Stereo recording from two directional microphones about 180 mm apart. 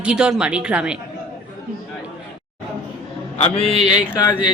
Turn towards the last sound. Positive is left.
turn(degrees=20)  # may be behind; listen again after turning